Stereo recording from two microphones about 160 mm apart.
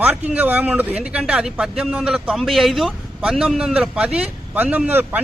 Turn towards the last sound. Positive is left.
turn(degrees=-10)  # may be behind; listen again after turning